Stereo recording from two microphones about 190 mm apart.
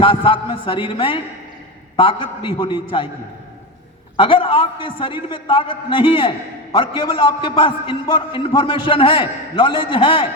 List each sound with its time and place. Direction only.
0.0 s a man's voice: 30° left (ahead or behind)
4.2 s a man's voice: 30° left (ahead or behind)